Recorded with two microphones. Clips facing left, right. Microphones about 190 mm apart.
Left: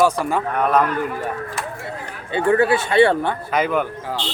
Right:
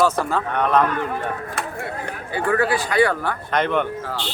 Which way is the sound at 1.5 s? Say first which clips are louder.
Right 1 dB; 60° right (ahead or behind).